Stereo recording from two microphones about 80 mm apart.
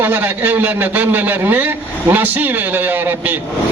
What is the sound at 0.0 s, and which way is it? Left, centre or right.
A man's voice, right.